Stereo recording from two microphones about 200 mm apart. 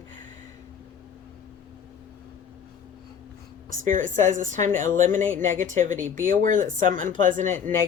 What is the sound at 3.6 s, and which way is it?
A woman's voice, 40° right (ahead or behind).